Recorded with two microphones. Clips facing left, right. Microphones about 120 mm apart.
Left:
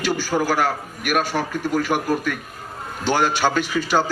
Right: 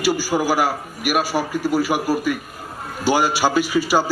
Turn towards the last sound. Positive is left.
turn(degrees=-10)  # may be behind; listen again after turning